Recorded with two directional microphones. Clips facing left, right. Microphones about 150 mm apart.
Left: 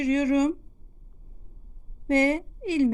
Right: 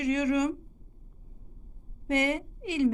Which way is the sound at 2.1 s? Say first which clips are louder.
Left 5 dB; 35° left (ahead or behind).